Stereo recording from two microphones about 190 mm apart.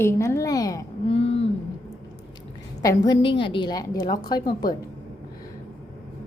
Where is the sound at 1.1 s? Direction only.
30° left (ahead or behind).